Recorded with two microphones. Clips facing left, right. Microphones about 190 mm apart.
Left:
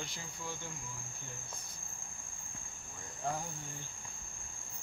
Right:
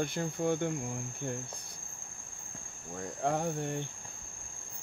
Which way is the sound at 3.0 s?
70° right (ahead or behind).